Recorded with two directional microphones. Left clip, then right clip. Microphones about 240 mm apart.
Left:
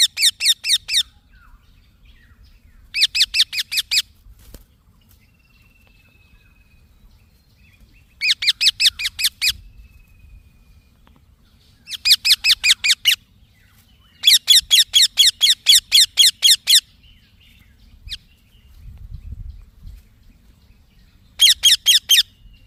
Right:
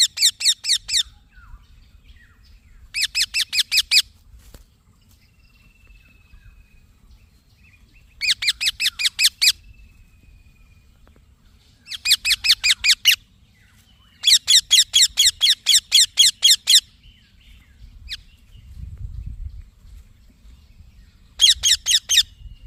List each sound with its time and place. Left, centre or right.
0.0 s a sound: left
2.9 s bird: centre
8.2 s bird: centre
11.9 s squeak: centre
14.2 s squeak: centre
21.3 s a sound: centre